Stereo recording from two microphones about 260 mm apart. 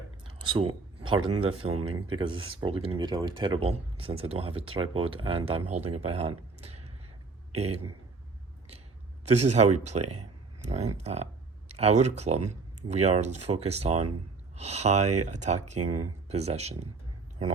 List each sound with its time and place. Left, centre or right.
0.4 s a sound: centre
1.4 s speech: right
6.6 s a sound: right
7.5 s speech: right
9.2 s speech: right
15.8 s speech: right
16.3 s speech: right